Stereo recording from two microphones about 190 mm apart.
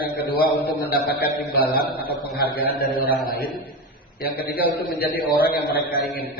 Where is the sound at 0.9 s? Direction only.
55° left (ahead or behind).